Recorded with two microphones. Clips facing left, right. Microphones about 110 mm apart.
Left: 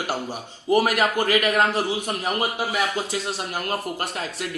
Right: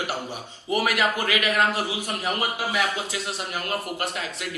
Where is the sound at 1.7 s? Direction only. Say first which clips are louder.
Left 3 dB; 5° right (ahead or behind).